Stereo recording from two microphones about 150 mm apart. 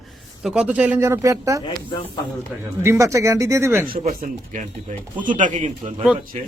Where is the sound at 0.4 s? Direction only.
5° right (ahead or behind).